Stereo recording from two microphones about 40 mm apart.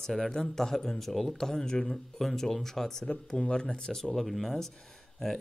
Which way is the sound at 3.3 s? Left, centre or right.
Left.